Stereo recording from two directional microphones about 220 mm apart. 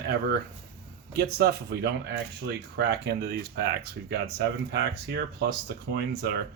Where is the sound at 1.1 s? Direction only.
45° right (ahead or behind).